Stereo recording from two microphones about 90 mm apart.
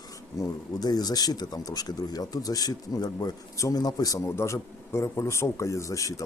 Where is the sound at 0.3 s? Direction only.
45° left (ahead or behind).